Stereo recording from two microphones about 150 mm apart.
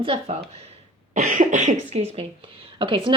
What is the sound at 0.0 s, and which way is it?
Speech, 40° right (ahead or behind).